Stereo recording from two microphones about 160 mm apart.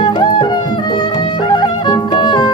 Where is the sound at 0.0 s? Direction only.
30° left (ahead or behind).